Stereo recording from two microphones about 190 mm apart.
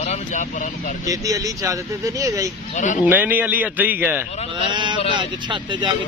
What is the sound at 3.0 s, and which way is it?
Speech, 10° right (ahead or behind).